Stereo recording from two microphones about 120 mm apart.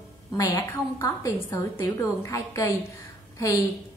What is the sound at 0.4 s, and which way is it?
A woman's voice, 30° left (ahead or behind).